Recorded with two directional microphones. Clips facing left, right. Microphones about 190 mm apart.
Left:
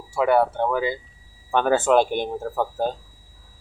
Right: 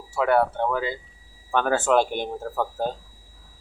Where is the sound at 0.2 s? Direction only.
10° left (ahead or behind).